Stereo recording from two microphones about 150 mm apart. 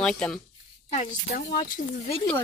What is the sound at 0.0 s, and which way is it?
Speech, 5° left (ahead or behind).